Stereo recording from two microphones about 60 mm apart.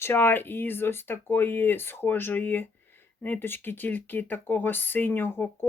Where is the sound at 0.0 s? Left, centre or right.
Left.